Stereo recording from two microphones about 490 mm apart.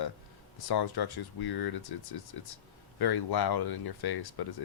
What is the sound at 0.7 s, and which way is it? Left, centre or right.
Speech, left.